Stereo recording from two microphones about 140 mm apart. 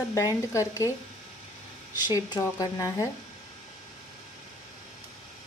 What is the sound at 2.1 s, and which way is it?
A woman's voice, 25° left (ahead or behind).